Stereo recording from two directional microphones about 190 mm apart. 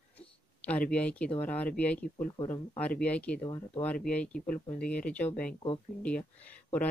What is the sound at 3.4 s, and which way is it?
Speech, 25° left (ahead or behind).